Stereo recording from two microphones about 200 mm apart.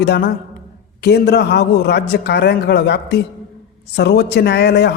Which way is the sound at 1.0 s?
55° left (ahead or behind).